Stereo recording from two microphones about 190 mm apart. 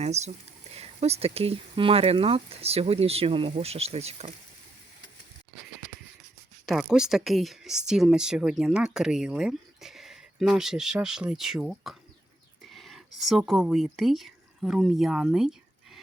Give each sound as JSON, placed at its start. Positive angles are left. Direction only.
{"t": 0.0, "sound": "speech", "side_deg": -35}
{"t": 6.7, "sound": "speech", "side_deg": 0}